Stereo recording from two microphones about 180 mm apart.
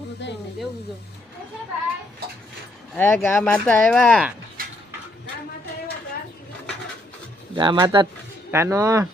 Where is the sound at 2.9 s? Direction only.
15° left (ahead or behind).